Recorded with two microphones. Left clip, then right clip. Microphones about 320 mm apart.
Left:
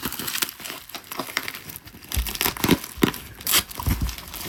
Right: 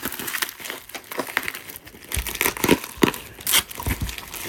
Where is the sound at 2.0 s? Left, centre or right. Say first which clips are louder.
Right 2 dB; centre.